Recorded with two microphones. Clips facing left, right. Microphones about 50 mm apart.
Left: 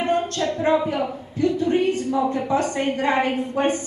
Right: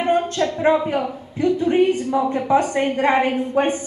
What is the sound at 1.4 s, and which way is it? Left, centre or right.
A woman's voice, right.